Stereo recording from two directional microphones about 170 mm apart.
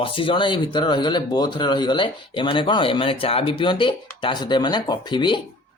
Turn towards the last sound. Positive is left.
turn(degrees=25)  # may be behind; listen again after turning